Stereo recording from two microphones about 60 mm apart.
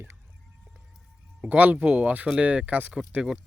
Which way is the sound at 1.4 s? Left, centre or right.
Right.